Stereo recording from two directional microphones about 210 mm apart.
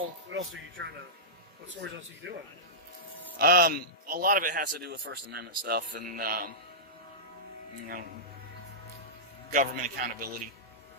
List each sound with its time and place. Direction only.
0.3 s speech: 65° right (ahead or behind)
3.4 s a man's voice: 45° right (ahead or behind)
9.5 s a man's voice: 35° right (ahead or behind)